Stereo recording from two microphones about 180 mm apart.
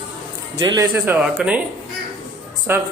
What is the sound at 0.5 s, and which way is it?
Speech, 25° right (ahead or behind).